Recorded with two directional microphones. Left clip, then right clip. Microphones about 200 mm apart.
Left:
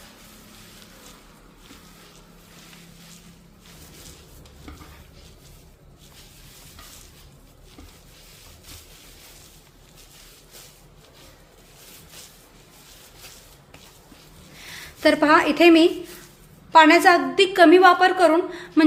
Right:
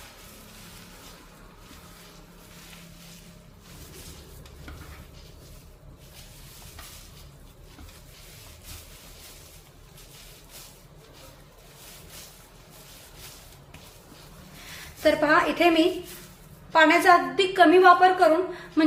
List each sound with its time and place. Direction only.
15.0 s a woman's voice: 55° left (ahead or behind)